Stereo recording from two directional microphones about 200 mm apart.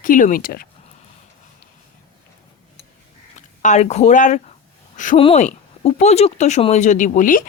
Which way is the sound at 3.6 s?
35° left (ahead or behind).